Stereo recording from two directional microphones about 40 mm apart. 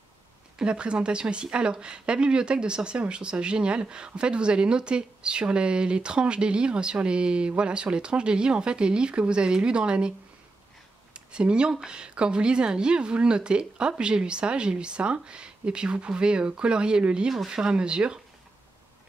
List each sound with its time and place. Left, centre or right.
0.6 s speech: right
11.1 s speech: right